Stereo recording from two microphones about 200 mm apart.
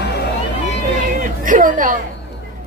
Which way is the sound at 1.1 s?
40° right (ahead or behind).